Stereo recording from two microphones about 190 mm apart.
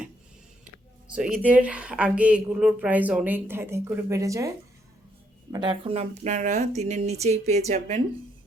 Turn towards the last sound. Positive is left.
turn(degrees=-40)  # may be behind; listen again after turning